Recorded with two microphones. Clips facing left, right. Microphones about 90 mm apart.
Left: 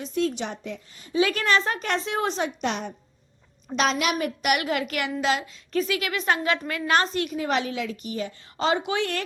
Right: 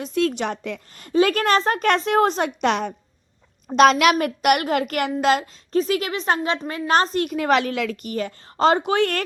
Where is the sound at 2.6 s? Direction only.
75° right (ahead or behind).